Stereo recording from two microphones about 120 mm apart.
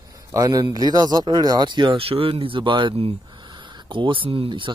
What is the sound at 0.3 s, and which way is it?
Speech, 30° right (ahead or behind).